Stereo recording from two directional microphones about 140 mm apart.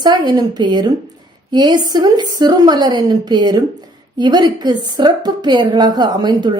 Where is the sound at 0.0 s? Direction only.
30° right (ahead or behind).